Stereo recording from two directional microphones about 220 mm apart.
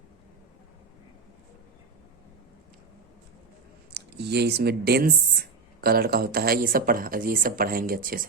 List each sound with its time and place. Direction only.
3.9 s speech: 50° right (ahead or behind)